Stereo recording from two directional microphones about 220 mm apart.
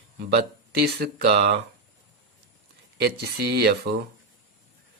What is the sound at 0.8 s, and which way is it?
Speech, 45° right (ahead or behind).